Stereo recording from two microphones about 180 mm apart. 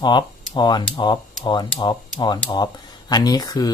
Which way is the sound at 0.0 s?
25° left (ahead or behind).